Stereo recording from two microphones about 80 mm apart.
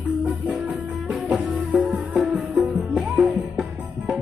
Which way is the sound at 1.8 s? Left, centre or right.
Centre.